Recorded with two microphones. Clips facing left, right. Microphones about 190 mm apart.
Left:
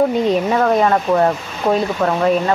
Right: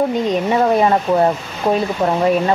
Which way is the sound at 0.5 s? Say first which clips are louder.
Even; 15° right (ahead or behind).